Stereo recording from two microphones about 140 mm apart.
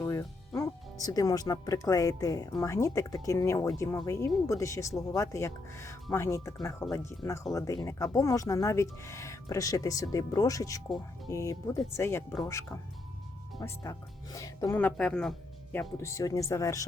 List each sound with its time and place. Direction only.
0.0 s speech: 20° left (ahead or behind)
13.6 s speech: 25° left (ahead or behind)
14.8 s speech: 10° left (ahead or behind)
15.7 s speech: 15° left (ahead or behind)